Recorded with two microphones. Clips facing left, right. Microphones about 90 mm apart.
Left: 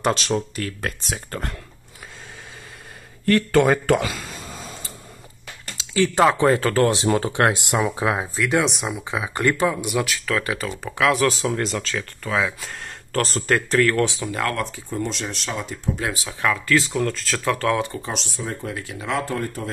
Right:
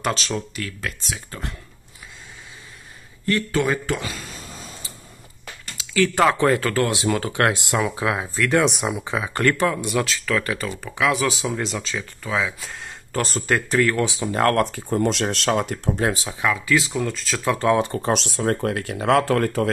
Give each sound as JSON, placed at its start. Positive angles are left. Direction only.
{"t": 0.0, "sound": "speech", "side_deg": 35}
{"t": 3.5, "sound": "speech", "side_deg": 60}
{"t": 5.8, "sound": "speech", "side_deg": 25}
{"t": 8.4, "sound": "speech", "side_deg": 5}
{"t": 9.1, "sound": "speech", "side_deg": 10}
{"t": 11.0, "sound": "speech", "side_deg": 0}
{"t": 14.4, "sound": "speech", "side_deg": -50}
{"t": 16.0, "sound": "speech", "side_deg": -35}
{"t": 16.3, "sound": "speech", "side_deg": -5}
{"t": 17.5, "sound": "speech", "side_deg": -20}
{"t": 18.1, "sound": "speech", "side_deg": -85}